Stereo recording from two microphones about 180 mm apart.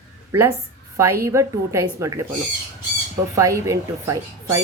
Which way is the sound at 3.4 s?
15° right (ahead or behind).